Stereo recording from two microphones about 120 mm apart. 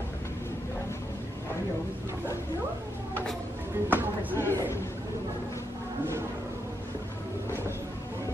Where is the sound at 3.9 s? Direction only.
15° right (ahead or behind).